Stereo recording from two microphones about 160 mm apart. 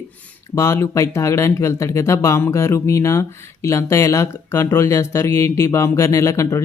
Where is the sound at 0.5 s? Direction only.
15° left (ahead or behind).